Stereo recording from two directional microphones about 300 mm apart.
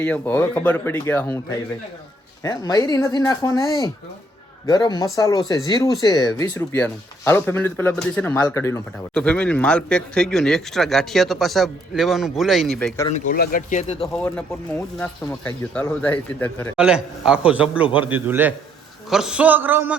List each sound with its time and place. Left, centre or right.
0.0 s speech: centre
13.1 s speech: left
14.1 s speech: centre